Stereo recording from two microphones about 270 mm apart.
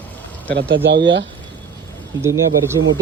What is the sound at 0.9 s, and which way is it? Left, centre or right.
Speech, right.